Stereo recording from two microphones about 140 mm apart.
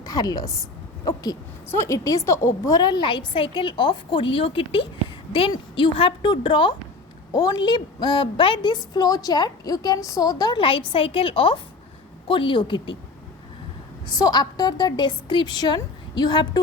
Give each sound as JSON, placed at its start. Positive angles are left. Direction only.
{"t": 0.0, "sound": "a woman's voice", "side_deg": 25}
{"t": 14.1, "sound": "a woman's voice", "side_deg": 30}